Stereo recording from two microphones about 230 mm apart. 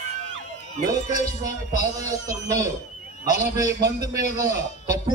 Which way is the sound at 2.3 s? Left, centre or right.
Centre.